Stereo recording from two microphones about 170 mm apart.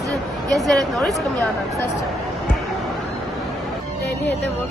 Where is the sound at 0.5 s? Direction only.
Centre (ahead or behind).